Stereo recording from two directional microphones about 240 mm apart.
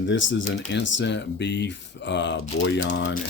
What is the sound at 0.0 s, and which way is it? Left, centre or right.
Speech, left.